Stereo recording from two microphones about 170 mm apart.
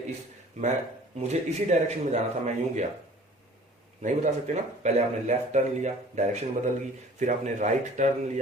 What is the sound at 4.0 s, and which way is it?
Speech, 45° right (ahead or behind).